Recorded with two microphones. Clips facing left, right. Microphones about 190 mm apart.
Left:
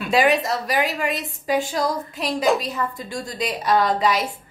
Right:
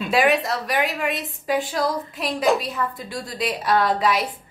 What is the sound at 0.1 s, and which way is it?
A woman's voice, centre (ahead or behind).